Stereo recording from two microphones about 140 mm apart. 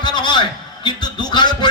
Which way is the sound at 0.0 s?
30° left (ahead or behind).